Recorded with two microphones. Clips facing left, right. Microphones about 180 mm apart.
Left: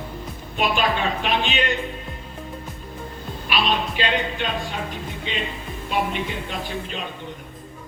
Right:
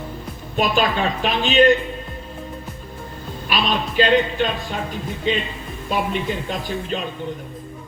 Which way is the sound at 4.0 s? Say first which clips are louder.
Right 12 dB; 40° right (ahead or behind).